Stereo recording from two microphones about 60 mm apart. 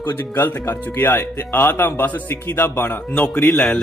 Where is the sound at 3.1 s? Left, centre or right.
Left.